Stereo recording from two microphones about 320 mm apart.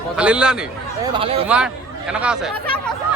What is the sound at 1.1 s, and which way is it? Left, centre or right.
Speech, centre.